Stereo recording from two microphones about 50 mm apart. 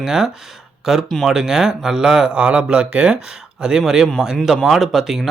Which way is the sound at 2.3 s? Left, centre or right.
Right.